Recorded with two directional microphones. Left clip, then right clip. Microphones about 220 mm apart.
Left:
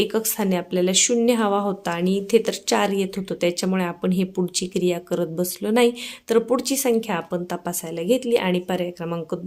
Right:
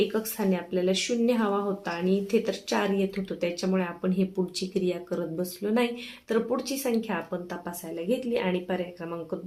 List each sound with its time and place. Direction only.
0.1 s speech: 50° left (ahead or behind)